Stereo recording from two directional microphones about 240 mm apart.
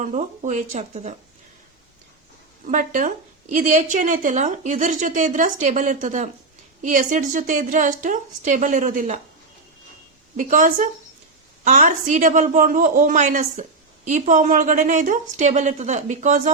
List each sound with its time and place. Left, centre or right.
0.0 s speech: right
2.6 s a woman's voice: right
10.3 s a woman's voice: right